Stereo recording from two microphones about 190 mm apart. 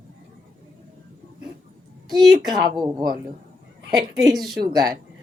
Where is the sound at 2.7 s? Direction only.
20° right (ahead or behind).